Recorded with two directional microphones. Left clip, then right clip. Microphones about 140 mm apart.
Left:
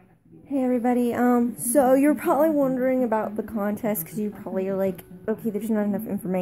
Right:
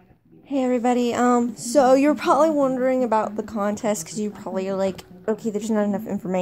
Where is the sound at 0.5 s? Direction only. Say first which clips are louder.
Right 2 dB; 10° right (ahead or behind).